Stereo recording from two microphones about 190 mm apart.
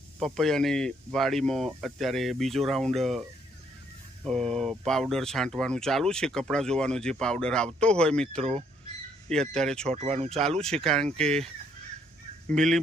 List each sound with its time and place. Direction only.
0.2 s speech: centre (ahead or behind)
9.9 s speech: 35° right (ahead or behind)
10.6 s speech: 5° left (ahead or behind)
12.5 s speech: centre (ahead or behind)